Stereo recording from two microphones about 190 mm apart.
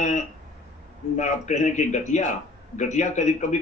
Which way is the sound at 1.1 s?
40° left (ahead or behind).